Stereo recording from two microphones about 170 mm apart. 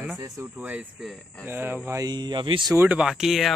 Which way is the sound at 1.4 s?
10° right (ahead or behind).